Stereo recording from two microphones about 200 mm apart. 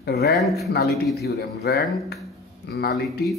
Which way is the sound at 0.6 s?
50° left (ahead or behind).